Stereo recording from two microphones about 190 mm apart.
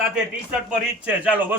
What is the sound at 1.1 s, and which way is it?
Speech, 10° right (ahead or behind).